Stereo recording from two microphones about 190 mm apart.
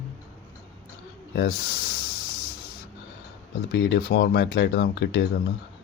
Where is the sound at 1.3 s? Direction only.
60° left (ahead or behind).